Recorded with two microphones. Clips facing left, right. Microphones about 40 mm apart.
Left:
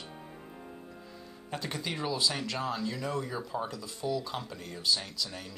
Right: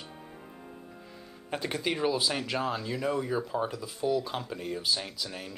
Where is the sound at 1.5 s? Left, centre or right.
Centre.